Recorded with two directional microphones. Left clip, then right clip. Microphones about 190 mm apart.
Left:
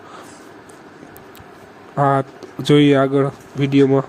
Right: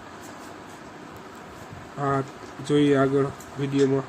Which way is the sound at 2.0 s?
45° left (ahead or behind).